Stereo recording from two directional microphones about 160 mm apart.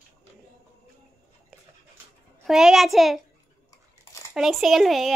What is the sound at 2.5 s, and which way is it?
Speech, centre (ahead or behind).